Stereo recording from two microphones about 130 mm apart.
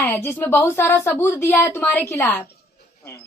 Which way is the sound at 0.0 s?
20° left (ahead or behind).